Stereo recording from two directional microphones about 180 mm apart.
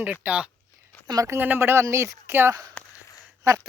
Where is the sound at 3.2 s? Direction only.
15° right (ahead or behind).